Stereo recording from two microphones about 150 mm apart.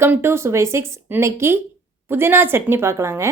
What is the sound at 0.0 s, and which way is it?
A woman's voice, 15° right (ahead or behind).